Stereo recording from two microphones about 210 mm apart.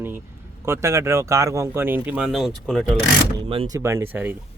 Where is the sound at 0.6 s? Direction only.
15° right (ahead or behind).